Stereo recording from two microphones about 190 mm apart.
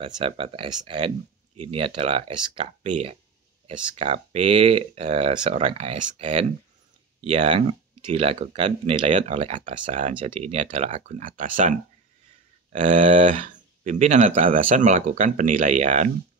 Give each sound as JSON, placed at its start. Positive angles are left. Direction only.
{"t": 0.0, "sound": "speech", "side_deg": -30}